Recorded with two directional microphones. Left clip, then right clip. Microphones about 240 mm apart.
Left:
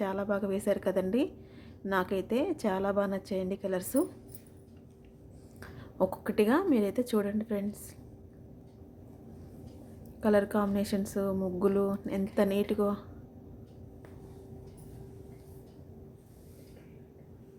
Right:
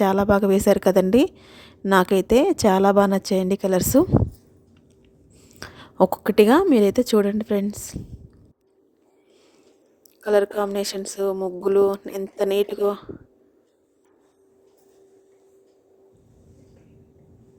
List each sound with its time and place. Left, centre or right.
0.0 s a woman's voice: right
5.5 s a woman's voice: right
10.2 s a woman's voice: right